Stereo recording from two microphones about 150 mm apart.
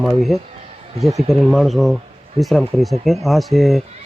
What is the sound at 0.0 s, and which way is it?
Speech, centre (ahead or behind).